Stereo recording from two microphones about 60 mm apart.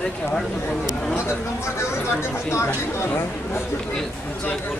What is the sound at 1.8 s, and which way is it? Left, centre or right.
Speech, left.